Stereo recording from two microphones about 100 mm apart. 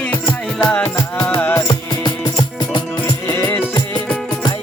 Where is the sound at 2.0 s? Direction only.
45° left (ahead or behind).